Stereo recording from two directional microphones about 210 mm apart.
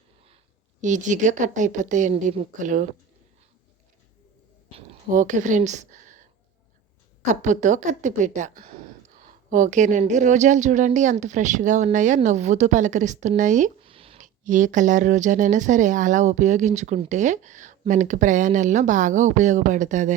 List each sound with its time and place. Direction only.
0.8 s a woman's voice: 35° right (ahead or behind)
5.1 s a woman's voice: 35° right (ahead or behind)
7.3 s a woman's voice: 35° right (ahead or behind)